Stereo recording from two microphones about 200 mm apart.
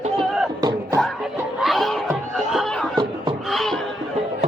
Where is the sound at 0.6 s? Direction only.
15° right (ahead or behind).